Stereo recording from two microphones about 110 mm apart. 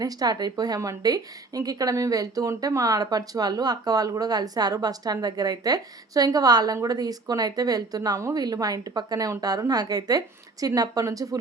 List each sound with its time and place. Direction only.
0.0 s a woman's voice: 35° right (ahead or behind)